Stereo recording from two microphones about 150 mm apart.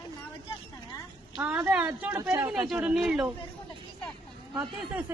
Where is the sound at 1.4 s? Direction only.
10° right (ahead or behind).